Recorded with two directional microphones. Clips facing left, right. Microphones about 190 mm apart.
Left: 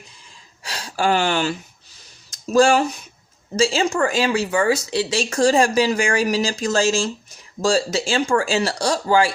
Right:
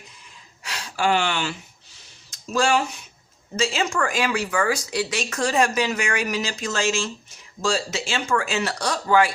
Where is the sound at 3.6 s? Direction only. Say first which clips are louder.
Left 5 dB; 30° left (ahead or behind).